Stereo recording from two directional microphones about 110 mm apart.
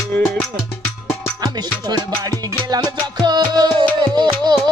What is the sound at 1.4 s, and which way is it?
Music, 40° right (ahead or behind).